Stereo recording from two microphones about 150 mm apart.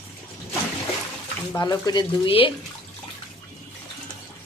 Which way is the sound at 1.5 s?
25° left (ahead or behind).